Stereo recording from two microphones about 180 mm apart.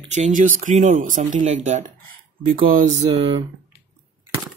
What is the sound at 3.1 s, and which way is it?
Speech, 30° right (ahead or behind).